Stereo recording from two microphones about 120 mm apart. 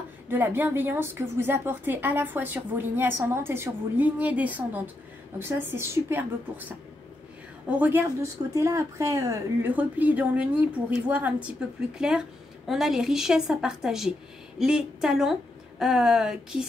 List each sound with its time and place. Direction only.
0.3 s a woman's voice: 15° right (ahead or behind)
7.6 s a woman's voice: 10° right (ahead or behind)
8.2 s a woman's voice: 25° right (ahead or behind)
9.8 s a woman's voice: 15° right (ahead or behind)